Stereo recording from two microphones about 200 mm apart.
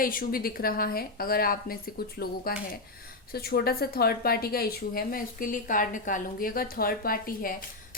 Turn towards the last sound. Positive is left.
turn(degrees=45)  # may be behind; listen again after turning